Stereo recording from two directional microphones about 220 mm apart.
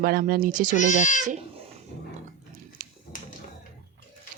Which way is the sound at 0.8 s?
35° left (ahead or behind).